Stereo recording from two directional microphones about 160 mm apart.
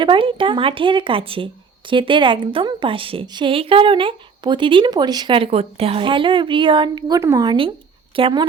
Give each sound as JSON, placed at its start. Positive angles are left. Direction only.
{"t": 0.0, "sound": "a woman's voice", "side_deg": -30}